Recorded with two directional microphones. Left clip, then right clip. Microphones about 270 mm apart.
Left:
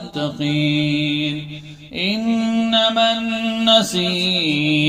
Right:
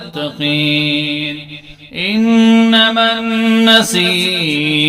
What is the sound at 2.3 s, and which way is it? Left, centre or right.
Mantra, right.